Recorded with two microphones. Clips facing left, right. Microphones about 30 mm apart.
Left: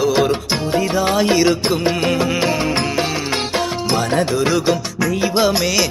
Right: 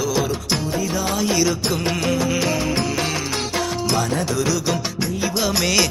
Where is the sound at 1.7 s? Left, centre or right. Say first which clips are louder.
Left 5 dB; centre.